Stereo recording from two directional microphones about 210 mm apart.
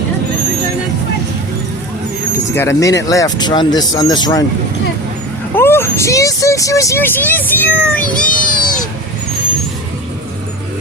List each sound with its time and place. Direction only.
2.3 s speech: 15° left (ahead or behind)
5.5 s speech: 10° left (ahead or behind)
8.0 s a child's voice: 40° left (ahead or behind)